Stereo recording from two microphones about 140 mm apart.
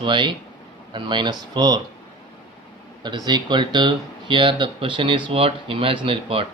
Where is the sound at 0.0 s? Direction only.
35° right (ahead or behind).